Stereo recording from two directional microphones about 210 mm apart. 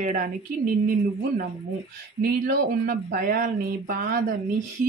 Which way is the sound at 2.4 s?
45° right (ahead or behind).